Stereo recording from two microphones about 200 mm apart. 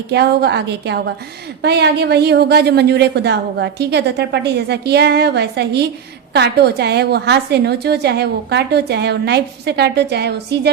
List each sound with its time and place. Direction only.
0.1 s a woman's voice: 55° right (ahead or behind)